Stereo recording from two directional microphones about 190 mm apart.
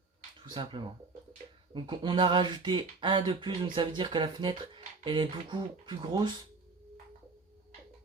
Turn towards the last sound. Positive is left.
turn(degrees=-25)  # may be behind; listen again after turning